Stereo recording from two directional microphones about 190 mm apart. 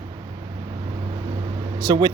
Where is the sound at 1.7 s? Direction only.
20° right (ahead or behind).